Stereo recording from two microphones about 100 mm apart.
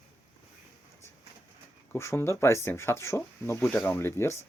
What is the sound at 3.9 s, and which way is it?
Speech, 25° left (ahead or behind).